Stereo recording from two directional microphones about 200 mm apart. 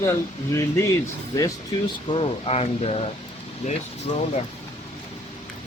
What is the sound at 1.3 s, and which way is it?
Speech, 20° left (ahead or behind).